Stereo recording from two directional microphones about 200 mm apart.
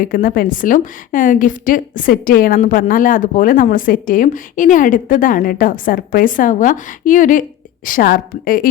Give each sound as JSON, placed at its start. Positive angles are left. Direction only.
{"t": 0.0, "sound": "a woman's voice", "side_deg": 45}